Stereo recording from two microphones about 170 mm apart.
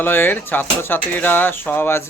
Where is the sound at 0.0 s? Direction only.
10° left (ahead or behind).